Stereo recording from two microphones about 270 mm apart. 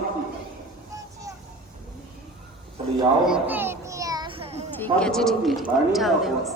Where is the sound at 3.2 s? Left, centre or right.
Centre; by 4.6 s right.